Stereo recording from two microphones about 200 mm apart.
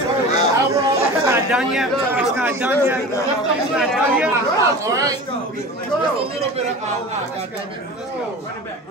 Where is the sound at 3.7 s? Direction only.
Centre (ahead or behind).